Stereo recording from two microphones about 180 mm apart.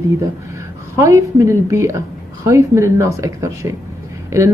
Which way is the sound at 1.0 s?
15° right (ahead or behind).